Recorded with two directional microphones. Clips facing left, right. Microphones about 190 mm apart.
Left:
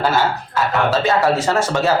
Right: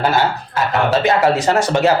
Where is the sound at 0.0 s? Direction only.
20° right (ahead or behind).